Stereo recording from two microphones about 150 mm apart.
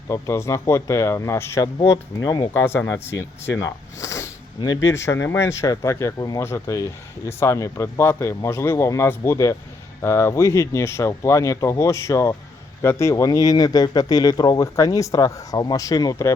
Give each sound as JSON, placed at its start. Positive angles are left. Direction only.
{"t": 0.1, "sound": "speech", "side_deg": 20}
{"t": 1.8, "sound": "speech", "side_deg": 30}
{"t": 2.5, "sound": "speech", "side_deg": 15}